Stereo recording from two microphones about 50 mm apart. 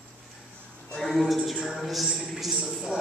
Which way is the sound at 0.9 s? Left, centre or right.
Centre.